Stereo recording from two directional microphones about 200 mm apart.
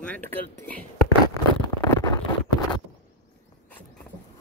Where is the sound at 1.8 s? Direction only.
15° left (ahead or behind).